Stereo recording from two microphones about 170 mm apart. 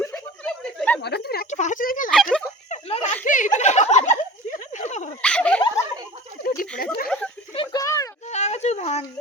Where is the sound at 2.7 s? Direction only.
40° left (ahead or behind).